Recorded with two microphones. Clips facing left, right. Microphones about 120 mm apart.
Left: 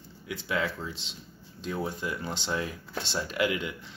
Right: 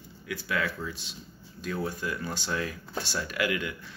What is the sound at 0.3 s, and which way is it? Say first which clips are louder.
Speech: even; 20° left (ahead or behind).